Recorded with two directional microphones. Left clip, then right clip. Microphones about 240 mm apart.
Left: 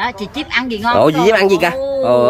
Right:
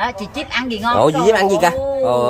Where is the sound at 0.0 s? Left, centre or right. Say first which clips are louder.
Left 1 dB; right.